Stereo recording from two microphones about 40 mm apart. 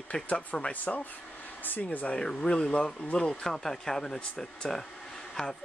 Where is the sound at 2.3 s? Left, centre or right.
Centre.